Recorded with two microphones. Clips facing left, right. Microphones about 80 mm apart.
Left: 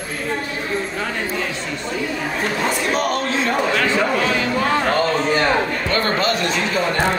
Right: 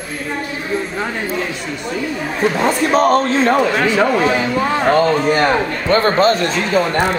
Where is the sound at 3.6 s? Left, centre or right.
Right.